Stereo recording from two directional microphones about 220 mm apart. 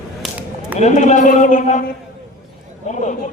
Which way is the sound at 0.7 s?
30° left (ahead or behind).